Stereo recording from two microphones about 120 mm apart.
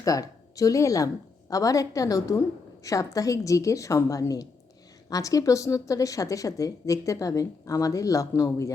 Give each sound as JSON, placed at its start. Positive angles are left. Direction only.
{"t": 0.0, "sound": "a woman's voice", "side_deg": 30}